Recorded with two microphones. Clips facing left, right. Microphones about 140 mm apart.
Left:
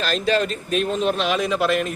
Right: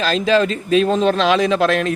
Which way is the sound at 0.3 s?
90° right.